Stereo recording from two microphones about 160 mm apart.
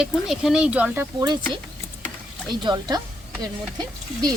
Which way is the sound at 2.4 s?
25° right (ahead or behind).